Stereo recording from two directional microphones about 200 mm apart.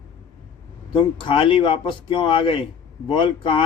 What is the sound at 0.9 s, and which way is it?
Speech, 25° left (ahead or behind).